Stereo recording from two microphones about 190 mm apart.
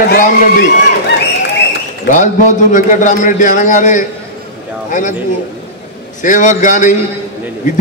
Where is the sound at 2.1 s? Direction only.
45° left (ahead or behind).